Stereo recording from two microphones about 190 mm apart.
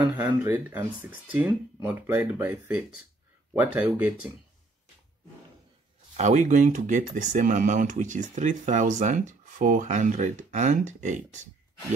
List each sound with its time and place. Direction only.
0.0 s speech: 10° right (ahead or behind)
6.1 s speech: 40° right (ahead or behind)